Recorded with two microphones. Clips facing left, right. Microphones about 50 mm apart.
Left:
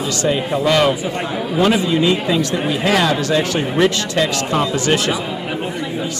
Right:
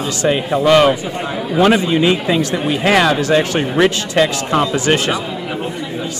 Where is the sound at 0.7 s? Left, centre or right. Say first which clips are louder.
Right 5 dB; right.